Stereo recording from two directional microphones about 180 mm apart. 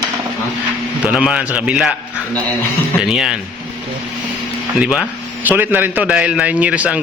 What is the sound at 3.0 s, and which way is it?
Speech, 5° right (ahead or behind).